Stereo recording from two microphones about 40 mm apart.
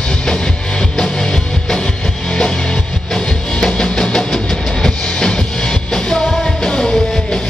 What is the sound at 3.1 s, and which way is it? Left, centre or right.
Music, centre.